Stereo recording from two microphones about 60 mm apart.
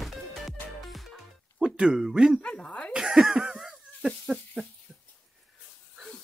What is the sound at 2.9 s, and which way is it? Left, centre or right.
Laughter, centre.